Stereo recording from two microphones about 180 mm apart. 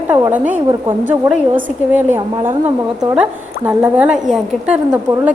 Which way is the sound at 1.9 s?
10° right (ahead or behind).